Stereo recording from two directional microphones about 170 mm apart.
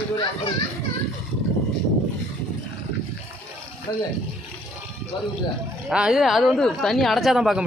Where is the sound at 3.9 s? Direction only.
20° left (ahead or behind).